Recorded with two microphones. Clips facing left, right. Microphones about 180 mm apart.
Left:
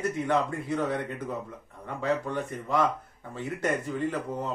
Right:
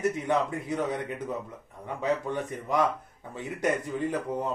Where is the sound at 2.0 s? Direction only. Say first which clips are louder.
Even; 15° right (ahead or behind).